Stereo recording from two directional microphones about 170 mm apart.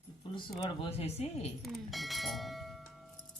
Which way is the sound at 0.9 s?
35° left (ahead or behind).